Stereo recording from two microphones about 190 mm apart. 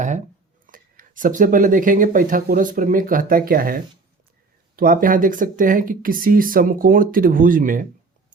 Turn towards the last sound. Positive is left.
turn(degrees=-45)  # may be behind; listen again after turning